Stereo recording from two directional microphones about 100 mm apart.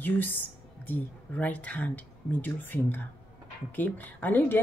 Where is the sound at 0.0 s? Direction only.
20° left (ahead or behind).